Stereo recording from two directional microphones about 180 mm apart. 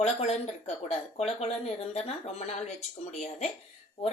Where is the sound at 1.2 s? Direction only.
35° left (ahead or behind).